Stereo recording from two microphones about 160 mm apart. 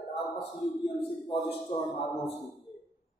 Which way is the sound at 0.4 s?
35° left (ahead or behind).